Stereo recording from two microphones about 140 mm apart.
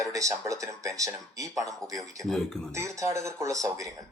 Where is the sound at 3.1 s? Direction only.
20° right (ahead or behind).